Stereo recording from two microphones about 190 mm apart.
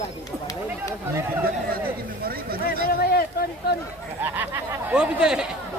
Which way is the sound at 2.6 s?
50° left (ahead or behind).